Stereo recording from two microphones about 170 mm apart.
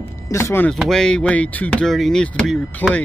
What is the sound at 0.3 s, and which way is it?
Speech, 15° left (ahead or behind).